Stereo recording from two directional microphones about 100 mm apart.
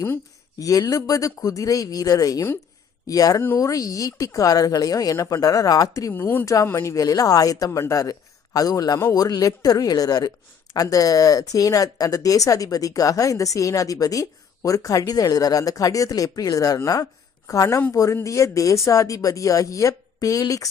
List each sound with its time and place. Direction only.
0.6 s speech: 35° left (ahead or behind)
6.1 s speech: 20° left (ahead or behind)
6.4 s speech: 35° left (ahead or behind)